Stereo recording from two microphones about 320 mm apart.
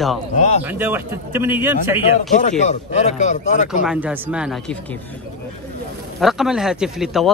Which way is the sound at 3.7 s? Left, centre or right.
Centre.